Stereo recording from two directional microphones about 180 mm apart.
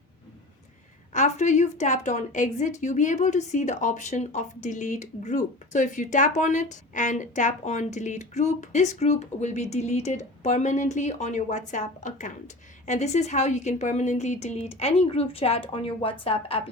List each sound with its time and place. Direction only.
1.1 s a woman's voice: 40° left (ahead or behind)